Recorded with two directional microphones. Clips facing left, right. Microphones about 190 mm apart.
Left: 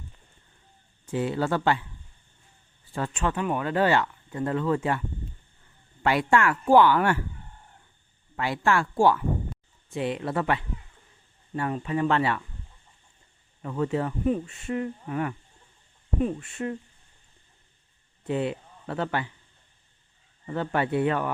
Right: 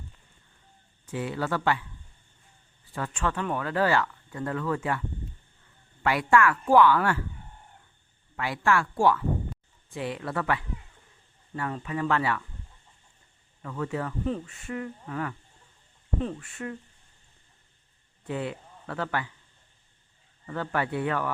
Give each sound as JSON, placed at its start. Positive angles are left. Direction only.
{"t": 1.0, "sound": "speech", "side_deg": 30}
{"t": 2.9, "sound": "speech", "side_deg": 25}
{"t": 8.4, "sound": "speech", "side_deg": 25}
{"t": 13.6, "sound": "speech", "side_deg": 25}
{"t": 16.4, "sound": "speech", "side_deg": 25}
{"t": 18.3, "sound": "speech", "side_deg": 25}
{"t": 20.5, "sound": "speech", "side_deg": 25}